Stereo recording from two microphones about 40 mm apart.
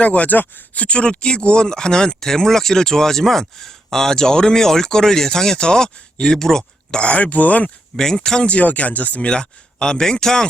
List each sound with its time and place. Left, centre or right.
0.0 s speech: left; by 6.7 s centre
6.9 s speech: left
7.2 s speech: left
7.9 s speech: centre
8.4 s speech: left
9.3 s speech: left